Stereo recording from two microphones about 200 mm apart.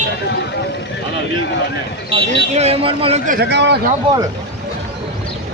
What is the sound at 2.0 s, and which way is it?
Speech, 30° right (ahead or behind).